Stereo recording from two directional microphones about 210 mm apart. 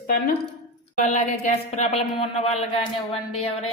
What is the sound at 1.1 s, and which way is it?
Speech, 35° left (ahead or behind).